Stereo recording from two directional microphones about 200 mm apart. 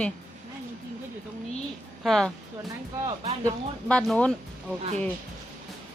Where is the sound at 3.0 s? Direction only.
30° right (ahead or behind).